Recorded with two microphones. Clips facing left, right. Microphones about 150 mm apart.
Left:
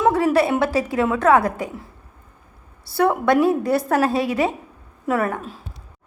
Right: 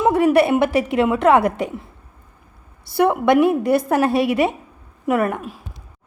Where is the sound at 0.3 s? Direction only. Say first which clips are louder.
Right 3 dB; 15° right (ahead or behind).